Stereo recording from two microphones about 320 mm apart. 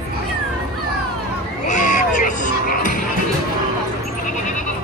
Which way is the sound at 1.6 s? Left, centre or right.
Left.